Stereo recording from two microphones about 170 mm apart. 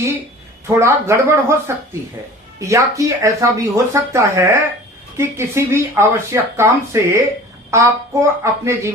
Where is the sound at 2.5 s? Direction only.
20° right (ahead or behind).